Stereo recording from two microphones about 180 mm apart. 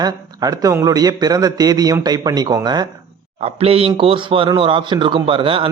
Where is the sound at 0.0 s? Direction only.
20° right (ahead or behind).